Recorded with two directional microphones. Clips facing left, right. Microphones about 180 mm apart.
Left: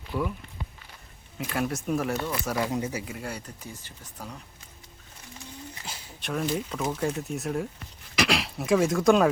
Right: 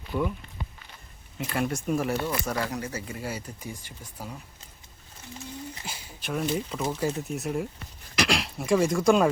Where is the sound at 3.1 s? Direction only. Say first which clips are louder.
Right 1 dB; 5° right (ahead or behind).